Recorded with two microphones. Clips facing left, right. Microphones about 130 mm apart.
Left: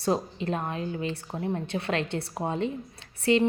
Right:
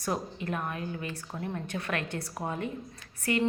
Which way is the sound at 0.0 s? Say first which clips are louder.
Left 6 dB; 25° left (ahead or behind).